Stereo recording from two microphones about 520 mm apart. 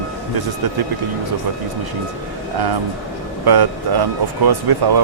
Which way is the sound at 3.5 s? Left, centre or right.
Right.